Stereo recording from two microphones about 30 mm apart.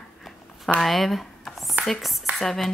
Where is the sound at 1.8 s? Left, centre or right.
Right.